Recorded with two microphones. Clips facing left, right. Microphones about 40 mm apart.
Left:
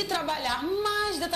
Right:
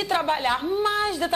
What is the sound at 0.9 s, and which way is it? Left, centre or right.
Speech, right.